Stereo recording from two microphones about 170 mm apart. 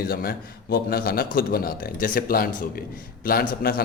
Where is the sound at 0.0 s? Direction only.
65° left (ahead or behind).